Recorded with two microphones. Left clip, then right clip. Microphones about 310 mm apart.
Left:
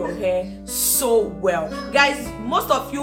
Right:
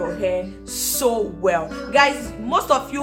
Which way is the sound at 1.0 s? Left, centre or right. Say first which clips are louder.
Left 1 dB; centre.